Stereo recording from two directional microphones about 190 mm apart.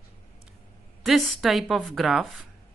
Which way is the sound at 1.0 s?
Centre (ahead or behind).